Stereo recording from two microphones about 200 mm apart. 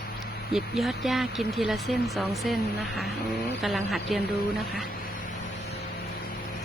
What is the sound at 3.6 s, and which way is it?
Speech, centre (ahead or behind).